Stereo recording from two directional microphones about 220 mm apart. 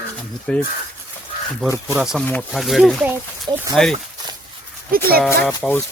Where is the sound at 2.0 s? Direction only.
Centre (ahead or behind).